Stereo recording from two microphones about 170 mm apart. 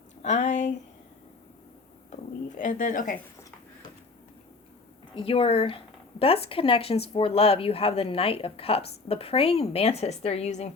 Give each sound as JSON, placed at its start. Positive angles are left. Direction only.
{"t": 0.2, "sound": "speech", "side_deg": 40}
{"t": 2.5, "sound": "speech", "side_deg": 45}
{"t": 5.1, "sound": "speech", "side_deg": 35}